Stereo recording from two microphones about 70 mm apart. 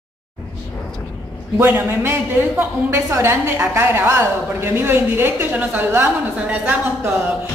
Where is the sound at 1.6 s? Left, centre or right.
Right.